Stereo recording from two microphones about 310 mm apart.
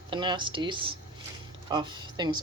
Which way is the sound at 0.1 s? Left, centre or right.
Centre.